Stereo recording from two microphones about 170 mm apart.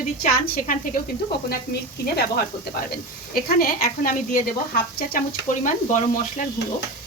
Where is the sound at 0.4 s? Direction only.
60° left (ahead or behind).